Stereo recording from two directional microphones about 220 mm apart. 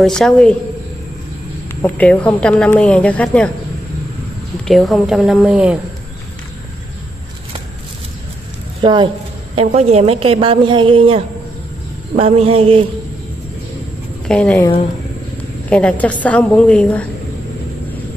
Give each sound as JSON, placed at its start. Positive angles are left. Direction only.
{"t": 0.0, "sound": "speech", "side_deg": 5}
{"t": 1.8, "sound": "speech", "side_deg": 10}
{"t": 4.6, "sound": "speech", "side_deg": 0}
{"t": 8.8, "sound": "a woman's voice", "side_deg": -20}
{"t": 14.2, "sound": "speech", "side_deg": 0}
{"t": 15.7, "sound": "speech", "side_deg": 5}